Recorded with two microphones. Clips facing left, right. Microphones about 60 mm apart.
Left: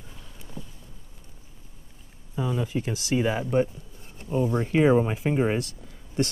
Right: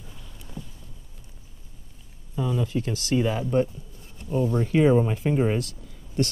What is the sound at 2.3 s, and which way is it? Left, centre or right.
Speech, centre.